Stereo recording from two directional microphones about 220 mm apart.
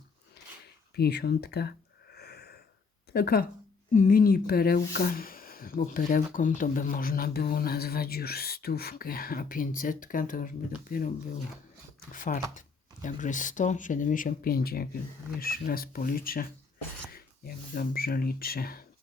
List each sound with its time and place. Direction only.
0.9 s speech: 45° left (ahead or behind)
2.1 s a sound: 45° left (ahead or behind)
3.1 s speech: 45° left (ahead or behind)
12.1 s speech: 35° left (ahead or behind)